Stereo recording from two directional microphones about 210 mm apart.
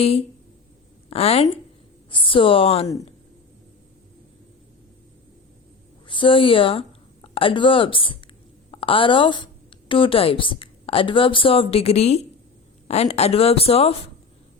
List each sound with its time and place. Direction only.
0.0 s speech: 30° left (ahead or behind)
6.1 s a woman's voice: 25° left (ahead or behind)